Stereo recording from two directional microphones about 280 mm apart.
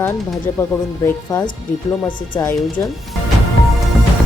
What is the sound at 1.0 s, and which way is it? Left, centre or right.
A woman's voice, centre.